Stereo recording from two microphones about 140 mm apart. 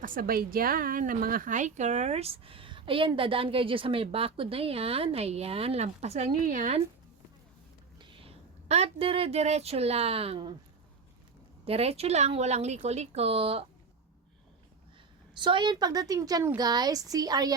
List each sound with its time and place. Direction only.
0.0 s a woman's voice: 85° right
7.9 s a woman's voice: 35° right (ahead or behind)
11.6 s a woman's voice: 45° right (ahead or behind)
15.4 s a woman's voice: 35° right (ahead or behind)